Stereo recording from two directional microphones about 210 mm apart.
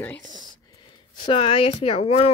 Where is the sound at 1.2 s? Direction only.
25° left (ahead or behind).